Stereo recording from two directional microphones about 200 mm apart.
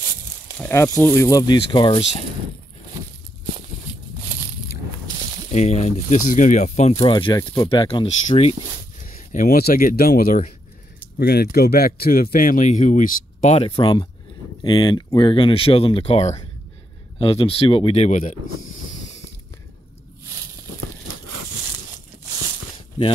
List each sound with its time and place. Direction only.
0.6 s speech: 10° left (ahead or behind); by 2.0 s 25° left (ahead or behind)
5.5 s speech: 35° left (ahead or behind)